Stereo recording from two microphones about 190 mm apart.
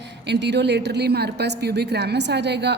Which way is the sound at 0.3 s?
65° right (ahead or behind).